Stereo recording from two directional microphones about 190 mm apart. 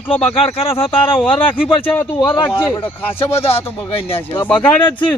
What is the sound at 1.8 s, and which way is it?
Speech, 10° left (ahead or behind).